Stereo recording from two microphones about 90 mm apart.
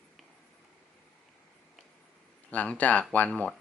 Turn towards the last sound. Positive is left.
turn(degrees=10)  # may be behind; listen again after turning